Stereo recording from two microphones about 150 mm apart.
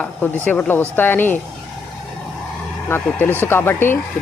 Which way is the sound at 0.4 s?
10° left (ahead or behind).